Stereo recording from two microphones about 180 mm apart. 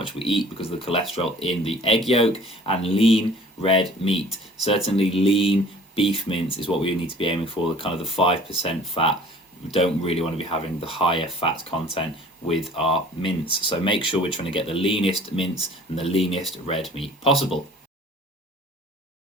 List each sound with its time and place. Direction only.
0.0 s speech: 30° left (ahead or behind)